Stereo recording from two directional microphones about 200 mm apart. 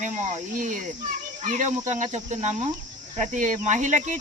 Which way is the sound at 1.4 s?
40° right (ahead or behind).